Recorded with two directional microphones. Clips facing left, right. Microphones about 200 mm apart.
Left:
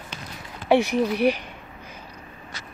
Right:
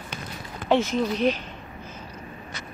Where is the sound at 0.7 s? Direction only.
15° left (ahead or behind).